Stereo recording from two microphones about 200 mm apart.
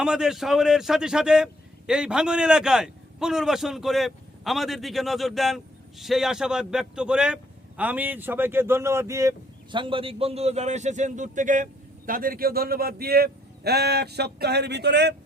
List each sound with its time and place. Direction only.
0.0 s a man's voice: 5° right (ahead or behind)
9.7 s a man's voice: 25° right (ahead or behind); by 15.1 s 55° right (ahead or behind)